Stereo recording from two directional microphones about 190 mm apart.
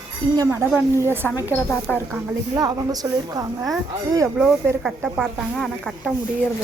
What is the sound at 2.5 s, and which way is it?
Speech, 20° right (ahead or behind).